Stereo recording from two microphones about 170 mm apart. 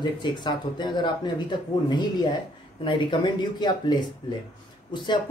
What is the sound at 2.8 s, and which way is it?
Speech, 30° left (ahead or behind).